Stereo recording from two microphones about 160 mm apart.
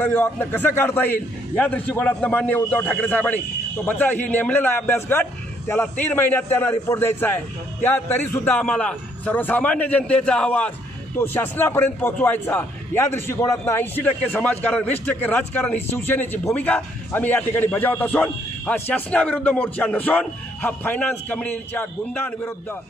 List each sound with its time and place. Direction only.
0.0 s a man's voice: 15° left (ahead or behind)